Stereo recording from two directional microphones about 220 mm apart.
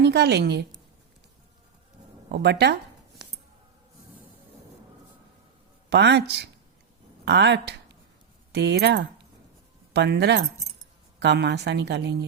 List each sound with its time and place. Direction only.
0.0 s a woman's voice: 50° right (ahead or behind)
2.3 s a woman's voice: 50° right (ahead or behind)
5.9 s a woman's voice: 50° right (ahead or behind)